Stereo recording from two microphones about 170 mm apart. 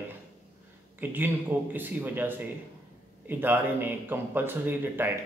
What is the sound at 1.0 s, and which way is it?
A man's voice, 10° right (ahead or behind).